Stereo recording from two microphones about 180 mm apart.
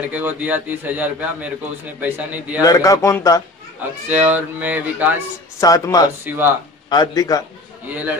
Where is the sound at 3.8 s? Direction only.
10° right (ahead or behind).